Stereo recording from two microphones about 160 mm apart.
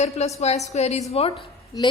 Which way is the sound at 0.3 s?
40° left (ahead or behind).